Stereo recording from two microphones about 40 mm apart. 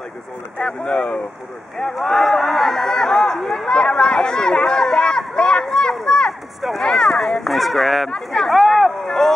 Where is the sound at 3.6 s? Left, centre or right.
Centre.